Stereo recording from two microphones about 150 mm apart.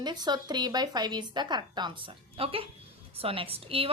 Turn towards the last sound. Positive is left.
turn(degrees=-40)  # may be behind; listen again after turning